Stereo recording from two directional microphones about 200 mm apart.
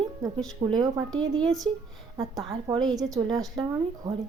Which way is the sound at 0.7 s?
20° right (ahead or behind).